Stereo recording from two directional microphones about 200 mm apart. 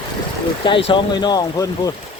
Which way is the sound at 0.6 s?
25° left (ahead or behind).